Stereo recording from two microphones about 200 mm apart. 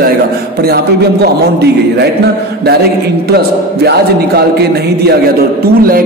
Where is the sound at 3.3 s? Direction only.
50° right (ahead or behind).